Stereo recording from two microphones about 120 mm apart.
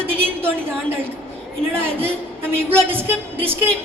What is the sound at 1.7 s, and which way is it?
A woman's voice, 20° right (ahead or behind).